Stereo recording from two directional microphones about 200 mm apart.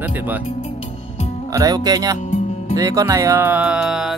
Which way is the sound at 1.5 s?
20° right (ahead or behind).